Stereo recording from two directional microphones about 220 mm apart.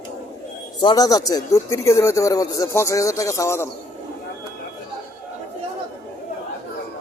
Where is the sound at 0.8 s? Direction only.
15° left (ahead or behind).